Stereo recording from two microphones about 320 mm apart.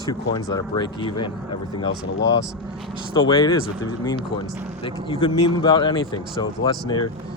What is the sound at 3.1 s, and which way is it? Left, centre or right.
Speech, centre.